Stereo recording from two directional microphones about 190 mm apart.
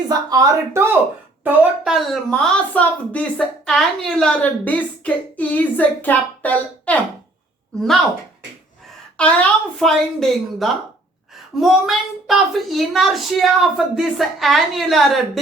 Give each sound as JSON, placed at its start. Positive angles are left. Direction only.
{"t": 0.1, "sound": "speech", "side_deg": -20}
{"t": 1.5, "sound": "a woman's voice", "side_deg": -5}
{"t": 9.1, "sound": "speech", "side_deg": 5}